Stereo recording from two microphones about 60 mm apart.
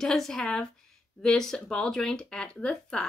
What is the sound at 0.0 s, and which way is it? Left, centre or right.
Speech, centre.